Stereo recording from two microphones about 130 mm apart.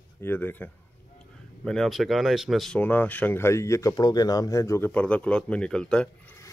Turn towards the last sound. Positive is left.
turn(degrees=5)  # may be behind; listen again after turning